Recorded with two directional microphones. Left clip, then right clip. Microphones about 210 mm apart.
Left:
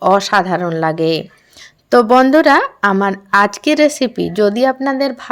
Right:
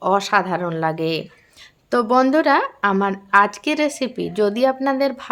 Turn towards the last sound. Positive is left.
turn(degrees=15)  # may be behind; listen again after turning